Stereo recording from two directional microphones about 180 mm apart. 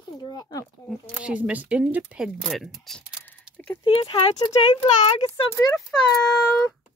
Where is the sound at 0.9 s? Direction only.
5° right (ahead or behind).